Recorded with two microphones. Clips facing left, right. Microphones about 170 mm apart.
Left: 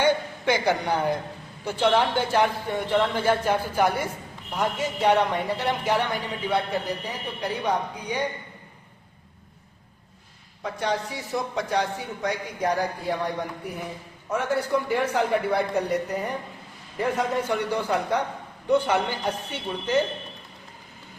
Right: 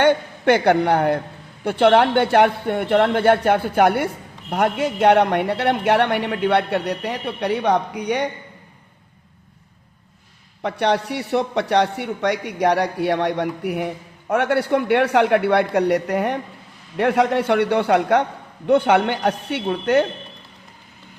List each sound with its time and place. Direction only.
0.0 s a man's voice: 60° right (ahead or behind)
10.6 s a man's voice: 70° right (ahead or behind)